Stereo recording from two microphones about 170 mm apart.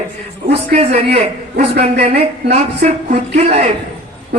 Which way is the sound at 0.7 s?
35° right (ahead or behind).